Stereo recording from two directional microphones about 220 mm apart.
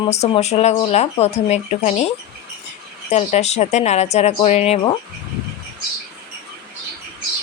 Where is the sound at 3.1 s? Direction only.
30° left (ahead or behind).